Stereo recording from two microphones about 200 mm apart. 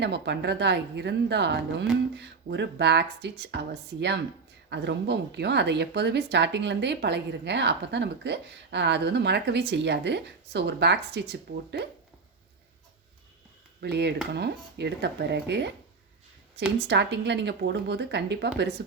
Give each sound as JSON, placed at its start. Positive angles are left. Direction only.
{"t": 0.0, "sound": "a woman's voice", "side_deg": -60}
{"t": 13.8, "sound": "a woman's voice", "side_deg": -55}
{"t": 16.7, "sound": "a woman's voice", "side_deg": -60}